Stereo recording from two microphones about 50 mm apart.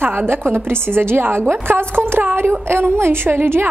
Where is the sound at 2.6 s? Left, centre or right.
Right.